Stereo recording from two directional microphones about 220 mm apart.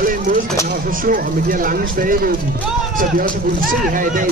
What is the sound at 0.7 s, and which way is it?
Speech, 40° right (ahead or behind).